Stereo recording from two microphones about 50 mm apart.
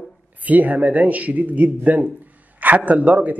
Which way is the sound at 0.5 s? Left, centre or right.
Right.